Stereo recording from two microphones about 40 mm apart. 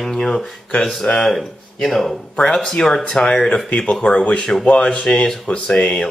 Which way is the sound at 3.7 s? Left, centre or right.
Left.